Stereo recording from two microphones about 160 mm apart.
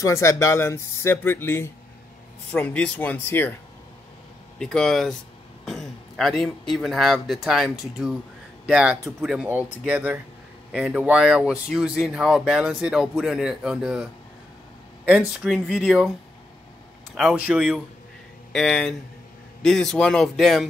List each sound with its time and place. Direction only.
0.0 s speech: 20° left (ahead or behind)
4.6 s a man's voice: centre (ahead or behind)
15.0 s speech: 5° right (ahead or behind)
17.1 s speech: 5° right (ahead or behind)